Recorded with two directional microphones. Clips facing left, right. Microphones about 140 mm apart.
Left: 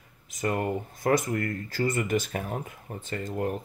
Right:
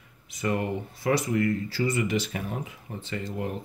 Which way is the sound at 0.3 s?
45° left (ahead or behind).